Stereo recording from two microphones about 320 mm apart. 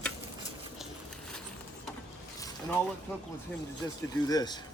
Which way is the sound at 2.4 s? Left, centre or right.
Centre.